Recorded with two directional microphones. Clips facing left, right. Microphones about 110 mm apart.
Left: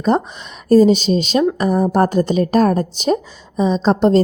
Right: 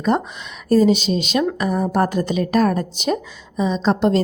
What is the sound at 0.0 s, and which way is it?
A woman's voice, 35° left (ahead or behind).